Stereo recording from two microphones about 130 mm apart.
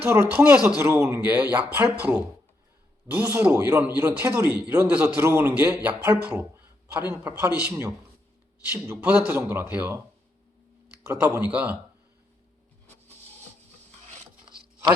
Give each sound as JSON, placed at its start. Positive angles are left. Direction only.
{"t": 0.0, "sound": "a man's voice", "side_deg": -20}
{"t": 1.2, "sound": "speech", "side_deg": -10}
{"t": 5.1, "sound": "a man's voice", "side_deg": -20}
{"t": 11.1, "sound": "speech", "side_deg": -15}
{"t": 14.4, "sound": "chopping", "side_deg": -35}